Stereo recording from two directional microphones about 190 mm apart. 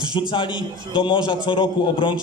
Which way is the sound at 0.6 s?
25° left (ahead or behind).